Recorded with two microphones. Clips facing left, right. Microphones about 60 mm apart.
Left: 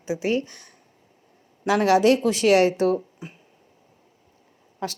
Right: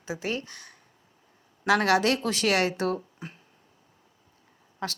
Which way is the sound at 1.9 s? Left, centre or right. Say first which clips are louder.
Left 6 dB; left.